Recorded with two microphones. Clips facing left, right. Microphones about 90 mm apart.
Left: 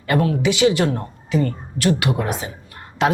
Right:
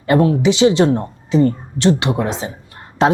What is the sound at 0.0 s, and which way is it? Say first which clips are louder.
Speech: right 5 dB; 30° right (ahead or behind).